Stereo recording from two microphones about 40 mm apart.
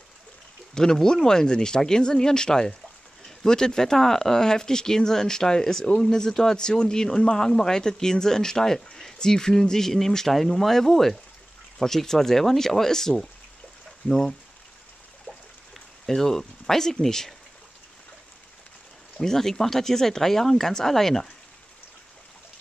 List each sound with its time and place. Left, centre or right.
0.7 s speech: centre
15.7 s a sound: centre
17.0 s speech: centre
19.1 s speech: centre